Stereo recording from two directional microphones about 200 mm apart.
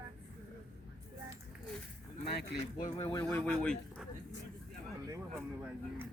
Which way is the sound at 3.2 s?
10° left (ahead or behind).